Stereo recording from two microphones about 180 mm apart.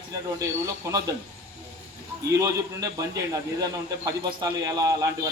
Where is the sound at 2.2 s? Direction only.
20° right (ahead or behind).